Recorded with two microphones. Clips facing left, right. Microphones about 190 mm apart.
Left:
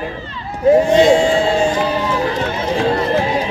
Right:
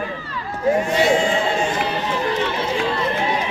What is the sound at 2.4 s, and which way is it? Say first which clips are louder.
Run: left 4 dB; 45° left (ahead or behind).